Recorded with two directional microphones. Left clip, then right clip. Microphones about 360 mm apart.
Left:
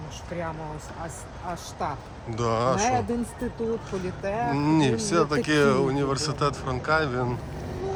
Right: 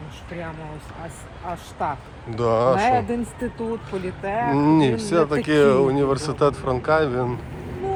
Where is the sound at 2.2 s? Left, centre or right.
Centre.